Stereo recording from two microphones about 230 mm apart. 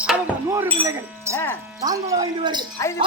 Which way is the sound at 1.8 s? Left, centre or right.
Centre.